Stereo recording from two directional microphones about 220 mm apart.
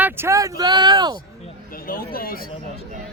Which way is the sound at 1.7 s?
40° left (ahead or behind).